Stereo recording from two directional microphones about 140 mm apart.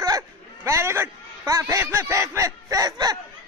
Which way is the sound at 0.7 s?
20° right (ahead or behind).